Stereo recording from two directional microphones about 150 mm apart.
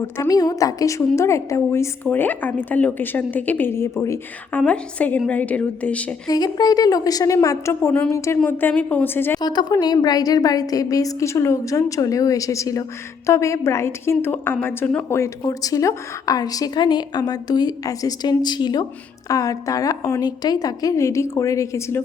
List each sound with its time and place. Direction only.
0.2 s a woman's voice: 25° left (ahead or behind); by 6.1 s 10° left (ahead or behind)
6.2 s a woman's voice: 25° left (ahead or behind)
9.4 s a woman's voice: 30° left (ahead or behind)